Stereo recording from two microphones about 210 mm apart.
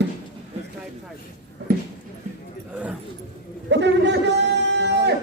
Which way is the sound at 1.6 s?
55° right (ahead or behind).